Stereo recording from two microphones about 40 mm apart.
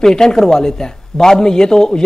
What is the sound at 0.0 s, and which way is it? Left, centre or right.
A man's voice, centre.